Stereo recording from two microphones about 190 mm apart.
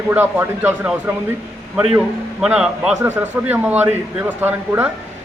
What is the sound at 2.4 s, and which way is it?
A man's voice, 5° right (ahead or behind).